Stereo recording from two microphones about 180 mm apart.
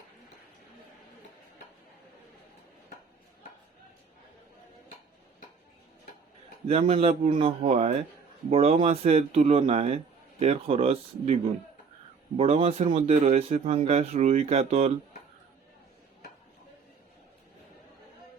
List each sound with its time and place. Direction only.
6.7 s speech: 35° right (ahead or behind)
12.4 s speech: 30° right (ahead or behind)